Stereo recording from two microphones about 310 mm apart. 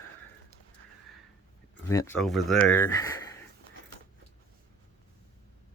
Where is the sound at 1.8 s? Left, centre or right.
Centre.